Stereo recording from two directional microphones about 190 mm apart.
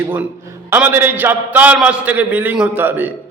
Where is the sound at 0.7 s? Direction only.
10° right (ahead or behind).